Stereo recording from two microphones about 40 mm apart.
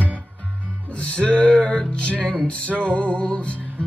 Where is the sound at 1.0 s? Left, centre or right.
Left.